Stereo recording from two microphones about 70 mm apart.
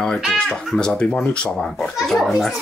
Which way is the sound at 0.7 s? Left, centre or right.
Centre.